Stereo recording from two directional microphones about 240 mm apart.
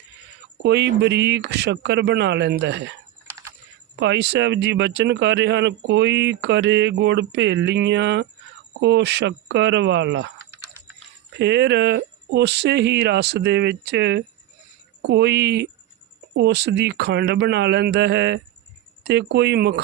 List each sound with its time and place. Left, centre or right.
0.6 s speech: right
4.0 s speech: right
11.3 s speech: right